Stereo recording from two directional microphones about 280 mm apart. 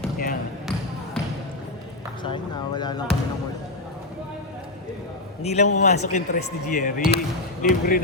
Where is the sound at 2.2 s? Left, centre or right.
Centre.